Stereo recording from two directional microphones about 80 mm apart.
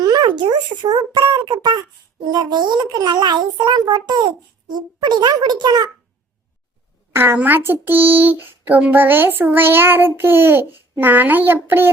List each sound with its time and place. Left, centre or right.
0.0 s a sound: right
0.3 s a child's voice: right
7.1 s a woman's voice: right
7.3 s child singing: right